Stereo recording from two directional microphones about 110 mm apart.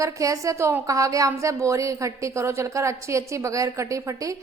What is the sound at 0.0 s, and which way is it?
A woman's voice, 30° right (ahead or behind).